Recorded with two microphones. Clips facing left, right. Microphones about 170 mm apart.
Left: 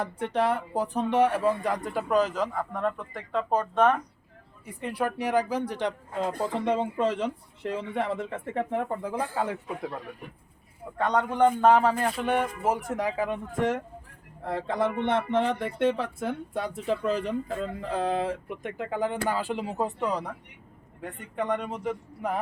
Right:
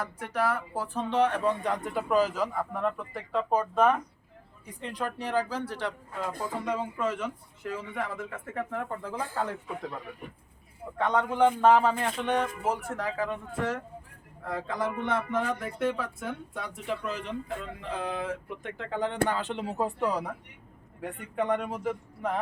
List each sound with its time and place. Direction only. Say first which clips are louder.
0.0 s speech: left 3 dB; 25° left (ahead or behind); by 3.9 s 5° right (ahead or behind)
4.6 s speech: left 5 dB; 10° left (ahead or behind)
11.3 s speech: left 1 dB; centre (ahead or behind); by 18.3 s 35° left (ahead or behind)
18.4 s speech: left 4 dB; 15° left (ahead or behind); by 21.9 s 5° right (ahead or behind)